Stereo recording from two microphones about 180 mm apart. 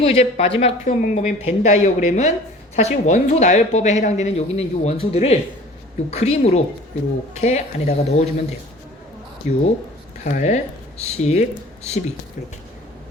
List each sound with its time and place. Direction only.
0.0 s a woman's voice: 35° left (ahead or behind)